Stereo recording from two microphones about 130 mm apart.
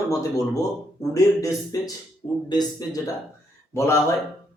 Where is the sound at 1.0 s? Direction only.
25° left (ahead or behind).